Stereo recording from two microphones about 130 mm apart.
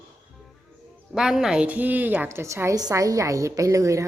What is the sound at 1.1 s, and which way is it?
A woman's voice, 5° right (ahead or behind).